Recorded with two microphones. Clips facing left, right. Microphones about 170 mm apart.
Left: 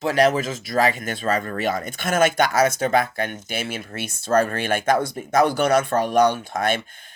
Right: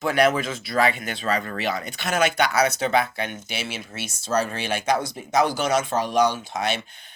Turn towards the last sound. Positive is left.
turn(degrees=50)  # may be behind; listen again after turning